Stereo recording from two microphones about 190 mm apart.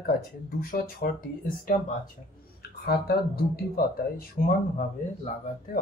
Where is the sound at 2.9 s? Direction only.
55° left (ahead or behind).